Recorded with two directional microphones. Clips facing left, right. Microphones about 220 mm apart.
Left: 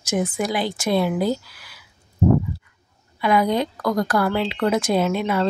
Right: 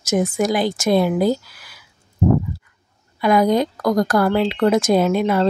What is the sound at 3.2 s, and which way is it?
Speech, 45° right (ahead or behind).